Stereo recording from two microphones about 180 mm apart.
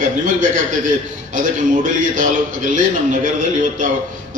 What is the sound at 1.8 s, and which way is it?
Speech, 45° right (ahead or behind).